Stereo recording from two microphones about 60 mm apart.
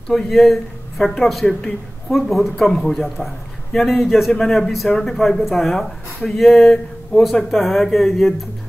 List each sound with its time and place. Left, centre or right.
0.1 s speech: centre